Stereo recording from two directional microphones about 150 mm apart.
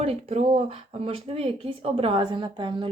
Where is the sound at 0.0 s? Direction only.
45° right (ahead or behind).